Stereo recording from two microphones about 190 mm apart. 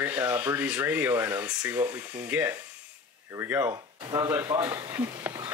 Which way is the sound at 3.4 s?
10° right (ahead or behind).